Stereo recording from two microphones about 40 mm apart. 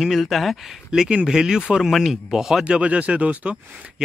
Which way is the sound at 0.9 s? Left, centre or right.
Right.